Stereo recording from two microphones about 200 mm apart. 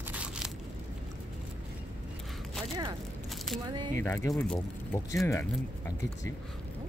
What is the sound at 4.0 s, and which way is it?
Speech, 15° left (ahead or behind).